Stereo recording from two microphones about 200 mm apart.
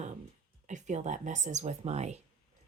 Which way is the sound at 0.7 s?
35° right (ahead or behind).